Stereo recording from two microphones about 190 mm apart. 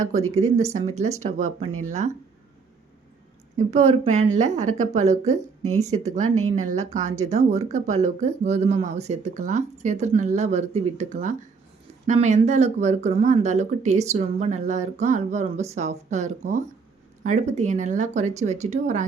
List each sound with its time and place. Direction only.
0.5 s speech: 35° right (ahead or behind)
3.7 s speech: 40° right (ahead or behind)